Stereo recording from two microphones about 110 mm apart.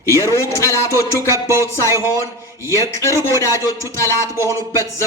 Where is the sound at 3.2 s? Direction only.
25° left (ahead or behind).